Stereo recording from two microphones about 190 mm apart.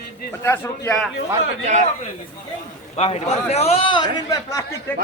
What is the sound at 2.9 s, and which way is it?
A man's voice, 35° left (ahead or behind).